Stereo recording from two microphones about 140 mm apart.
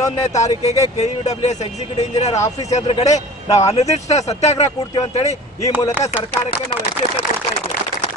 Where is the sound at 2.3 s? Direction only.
20° left (ahead or behind).